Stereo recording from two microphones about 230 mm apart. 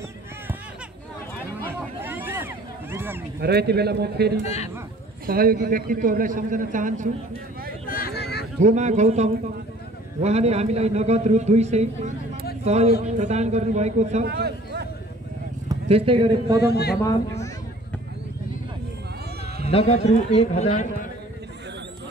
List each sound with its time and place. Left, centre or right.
1.6 s a sound: centre
3.3 s a man's voice: right
7.8 s a sound: left
8.6 s a man's voice: right
14.2 s a man's voice: right
15.7 s speech: right
16.6 s speech: left
17.0 s speech: centre
19.7 s a man's voice: left